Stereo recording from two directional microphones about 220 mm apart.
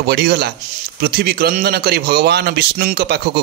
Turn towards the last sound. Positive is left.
turn(degrees=-50)  # may be behind; listen again after turning